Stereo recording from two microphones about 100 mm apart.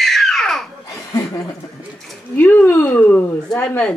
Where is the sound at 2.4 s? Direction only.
20° left (ahead or behind).